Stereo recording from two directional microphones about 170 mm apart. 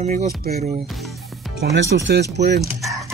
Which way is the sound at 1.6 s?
90° right.